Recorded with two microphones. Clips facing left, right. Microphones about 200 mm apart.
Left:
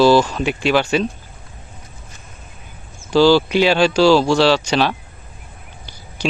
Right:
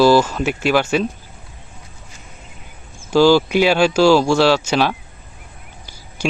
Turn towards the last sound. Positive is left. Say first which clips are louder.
# even
turn(degrees=-10)  # may be behind; listen again after turning